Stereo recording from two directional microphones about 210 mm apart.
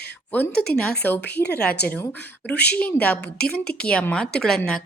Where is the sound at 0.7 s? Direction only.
5° left (ahead or behind).